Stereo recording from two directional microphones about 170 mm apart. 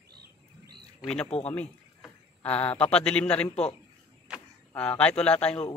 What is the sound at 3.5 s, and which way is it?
Speech, 35° left (ahead or behind).